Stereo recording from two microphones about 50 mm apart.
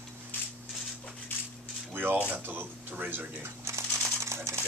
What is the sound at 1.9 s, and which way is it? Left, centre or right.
Speech, right.